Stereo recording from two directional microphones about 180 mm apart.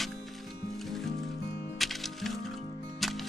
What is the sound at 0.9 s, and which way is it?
Music, centre (ahead or behind).